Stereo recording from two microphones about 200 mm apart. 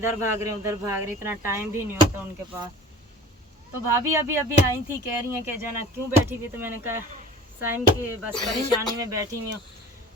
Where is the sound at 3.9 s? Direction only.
15° right (ahead or behind).